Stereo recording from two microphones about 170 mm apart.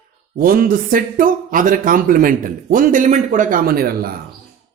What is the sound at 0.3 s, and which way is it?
Speech, 60° right (ahead or behind).